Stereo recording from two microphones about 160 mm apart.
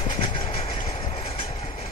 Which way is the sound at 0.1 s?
30° left (ahead or behind).